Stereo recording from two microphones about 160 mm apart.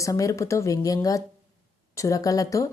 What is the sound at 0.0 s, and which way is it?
A woman's voice, 20° left (ahead or behind).